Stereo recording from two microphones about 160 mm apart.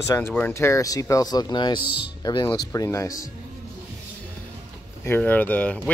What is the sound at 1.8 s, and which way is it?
Speech, 10° right (ahead or behind).